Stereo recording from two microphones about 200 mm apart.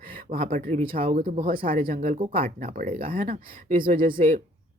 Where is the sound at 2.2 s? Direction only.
30° right (ahead or behind).